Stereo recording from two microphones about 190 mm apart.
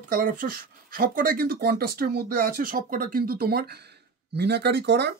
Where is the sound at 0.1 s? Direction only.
50° right (ahead or behind).